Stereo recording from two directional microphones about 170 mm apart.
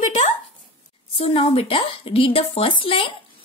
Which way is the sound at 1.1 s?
35° left (ahead or behind).